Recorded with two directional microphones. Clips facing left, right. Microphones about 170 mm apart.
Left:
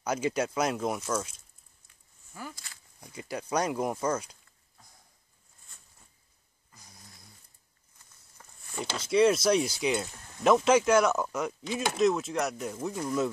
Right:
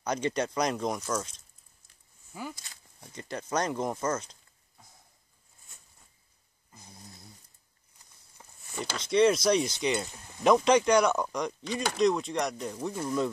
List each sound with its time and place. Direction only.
0.0 s chopping: 5° left (ahead or behind)
2.3 s speech: 15° right (ahead or behind)
3.1 s speech: 10° left (ahead or behind)
6.7 s a sound: 25° right (ahead or behind)
8.4 s a sound: 15° right (ahead or behind)
8.9 s chopping: 5° left (ahead or behind)